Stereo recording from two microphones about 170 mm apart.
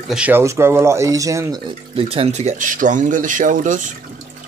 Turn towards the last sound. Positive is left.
turn(degrees=-50)  # may be behind; listen again after turning